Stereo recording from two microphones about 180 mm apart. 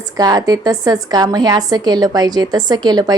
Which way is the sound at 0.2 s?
20° right (ahead or behind).